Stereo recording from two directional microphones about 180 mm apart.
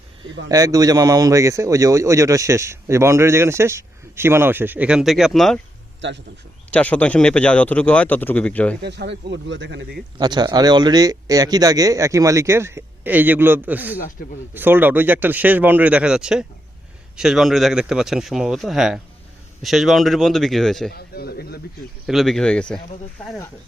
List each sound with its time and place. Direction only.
0.4 s a man's voice: 20° right (ahead or behind); by 5.5 s centre (ahead or behind)
6.0 s speech: 75° right (ahead or behind)
6.7 s a man's voice: 5° left (ahead or behind)
8.8 s speech: 70° right (ahead or behind)
10.2 s a man's voice: 25° right (ahead or behind); by 20.9 s centre (ahead or behind)
20.9 s a man's voice: 60° left (ahead or behind)
22.0 s speech: centre (ahead or behind)